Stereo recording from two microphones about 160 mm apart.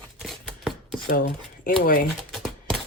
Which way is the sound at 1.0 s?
65° left (ahead or behind).